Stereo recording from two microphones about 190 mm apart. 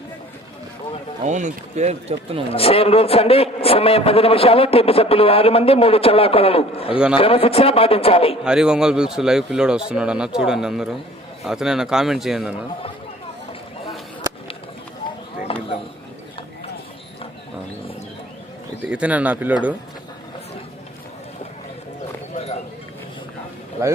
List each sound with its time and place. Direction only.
1.2 s speech: 40° right (ahead or behind)
2.5 s a man's voice: 30° left (ahead or behind)
8.4 s a man's voice: 5° right (ahead or behind)
15.5 s a sound: 30° left (ahead or behind)
18.9 s speech: 5° right (ahead or behind)